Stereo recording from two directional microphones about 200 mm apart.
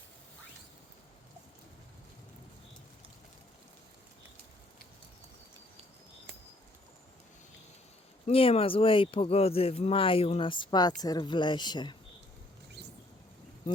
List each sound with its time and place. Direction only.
8.3 s speech: 30° left (ahead or behind)